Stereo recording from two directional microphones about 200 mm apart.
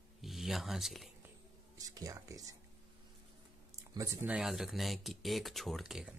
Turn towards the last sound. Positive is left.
turn(degrees=-5)  # may be behind; listen again after turning